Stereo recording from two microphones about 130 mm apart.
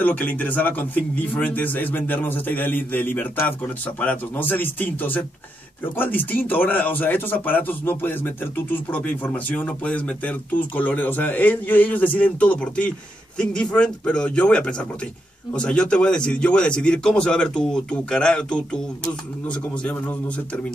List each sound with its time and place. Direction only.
0.0 s a man's voice: 10° left (ahead or behind)